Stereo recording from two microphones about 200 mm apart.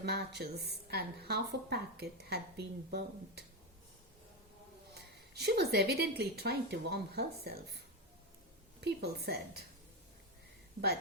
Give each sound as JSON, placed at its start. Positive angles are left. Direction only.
{"t": 0.0, "sound": "a woman's voice", "side_deg": -55}
{"t": 4.9, "sound": "a woman's voice", "side_deg": -55}